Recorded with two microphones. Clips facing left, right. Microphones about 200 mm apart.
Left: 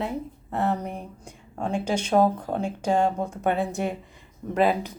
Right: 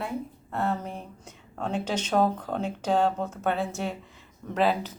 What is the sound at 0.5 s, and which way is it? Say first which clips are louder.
A woman's voice: left 3 dB; 20° left (ahead or behind).